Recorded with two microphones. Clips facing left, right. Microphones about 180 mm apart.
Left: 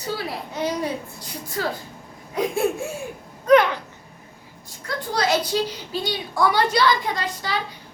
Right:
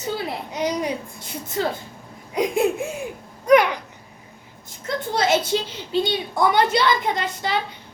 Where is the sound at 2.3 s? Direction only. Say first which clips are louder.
Right 2 dB; 15° right (ahead or behind).